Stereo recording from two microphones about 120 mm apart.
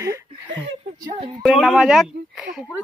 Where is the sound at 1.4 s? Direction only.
Centre (ahead or behind).